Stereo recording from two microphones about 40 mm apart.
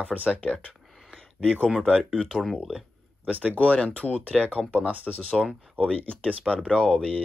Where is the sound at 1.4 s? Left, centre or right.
Left.